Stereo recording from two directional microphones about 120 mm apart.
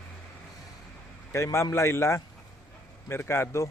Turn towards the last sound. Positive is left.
turn(degrees=20)  # may be behind; listen again after turning